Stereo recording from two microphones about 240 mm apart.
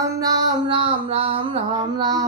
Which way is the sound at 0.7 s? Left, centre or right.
Right.